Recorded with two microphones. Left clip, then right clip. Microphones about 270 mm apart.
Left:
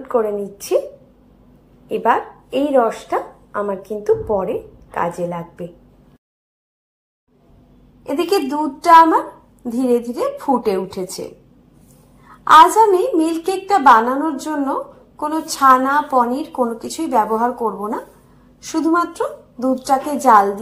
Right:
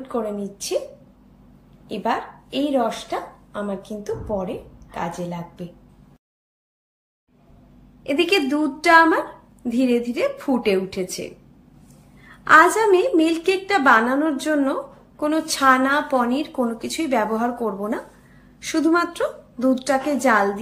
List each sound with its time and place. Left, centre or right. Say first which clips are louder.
0.1 s a woman's voice: left 8 dB; centre
1.9 s a woman's voice: left 7 dB; centre
8.3 s a woman's voice: left 2 dB; centre
10.2 s a woman's voice: left 4 dB; centre
10.6 s a woman's voice: left 1 dB; centre
12.4 s a woman's voice: left 5 dB; centre